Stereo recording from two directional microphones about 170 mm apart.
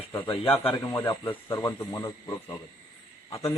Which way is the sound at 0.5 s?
35° left (ahead or behind).